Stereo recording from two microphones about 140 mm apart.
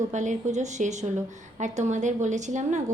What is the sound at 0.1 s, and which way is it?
Speech, 60° right (ahead or behind).